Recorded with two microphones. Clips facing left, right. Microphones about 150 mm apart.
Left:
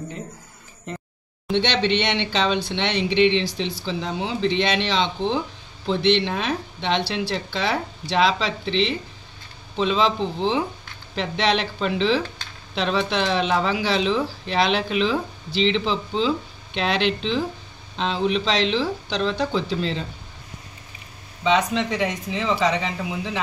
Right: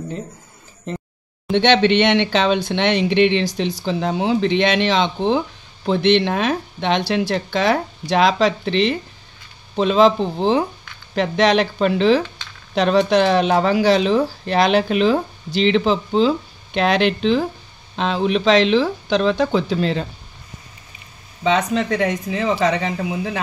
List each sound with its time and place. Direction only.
1.5 s speech: 55° right (ahead or behind)
21.5 s speech: 45° right (ahead or behind)